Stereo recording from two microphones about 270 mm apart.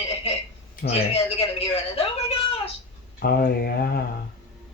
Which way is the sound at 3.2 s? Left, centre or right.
Left.